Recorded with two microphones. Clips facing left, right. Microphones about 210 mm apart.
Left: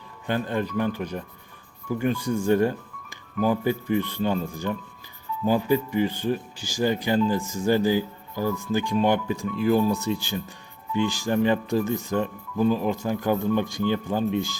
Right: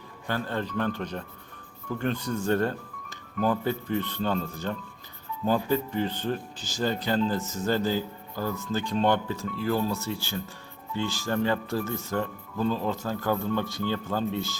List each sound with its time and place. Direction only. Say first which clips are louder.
0.3 s speech: left 4 dB; 15° left (ahead or behind)